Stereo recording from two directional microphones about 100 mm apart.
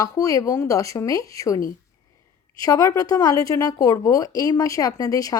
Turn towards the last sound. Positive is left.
turn(degrees=35)  # may be behind; listen again after turning